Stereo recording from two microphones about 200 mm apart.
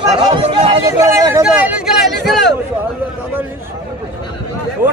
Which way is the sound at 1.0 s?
15° right (ahead or behind).